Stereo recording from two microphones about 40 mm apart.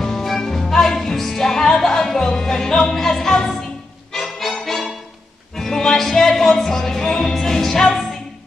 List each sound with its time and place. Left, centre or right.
0.0 s music: centre